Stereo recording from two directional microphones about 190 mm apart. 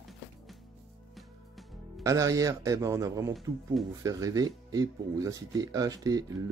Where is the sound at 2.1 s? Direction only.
15° right (ahead or behind).